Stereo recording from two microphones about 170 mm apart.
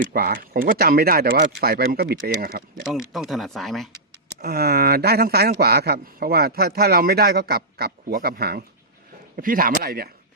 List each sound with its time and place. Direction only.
0.1 s speech: 60° right (ahead or behind)
2.8 s speech: centre (ahead or behind)
4.4 s speech: 65° right (ahead or behind)